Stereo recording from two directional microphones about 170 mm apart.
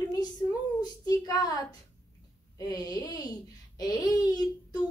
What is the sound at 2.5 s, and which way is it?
A child's voice, 20° left (ahead or behind).